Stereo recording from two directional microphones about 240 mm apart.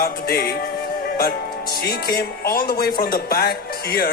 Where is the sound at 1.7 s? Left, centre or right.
Left.